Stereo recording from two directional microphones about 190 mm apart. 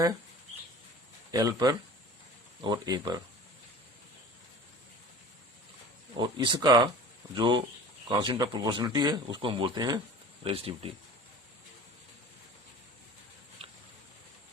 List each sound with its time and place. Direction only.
1.3 s speech: 20° right (ahead or behind)
6.1 s speech: 25° right (ahead or behind)